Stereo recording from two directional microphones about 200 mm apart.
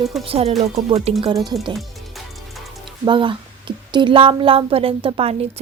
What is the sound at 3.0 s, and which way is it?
A woman's voice, 25° right (ahead or behind).